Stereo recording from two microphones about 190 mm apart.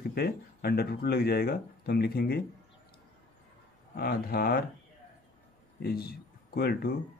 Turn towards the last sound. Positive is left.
turn(degrees=55)  # may be behind; listen again after turning